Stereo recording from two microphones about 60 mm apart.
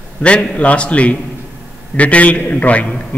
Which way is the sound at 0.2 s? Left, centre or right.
Centre.